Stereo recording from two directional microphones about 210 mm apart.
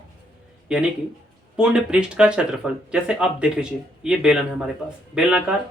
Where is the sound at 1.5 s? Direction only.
5° right (ahead or behind).